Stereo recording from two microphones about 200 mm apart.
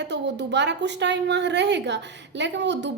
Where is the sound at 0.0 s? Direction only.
60° right (ahead or behind).